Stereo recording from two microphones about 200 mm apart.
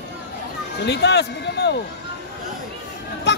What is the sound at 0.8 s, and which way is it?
Speech, 55° left (ahead or behind).